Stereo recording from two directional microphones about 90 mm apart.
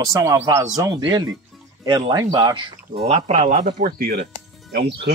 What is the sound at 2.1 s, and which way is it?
Speech, 40° right (ahead or behind).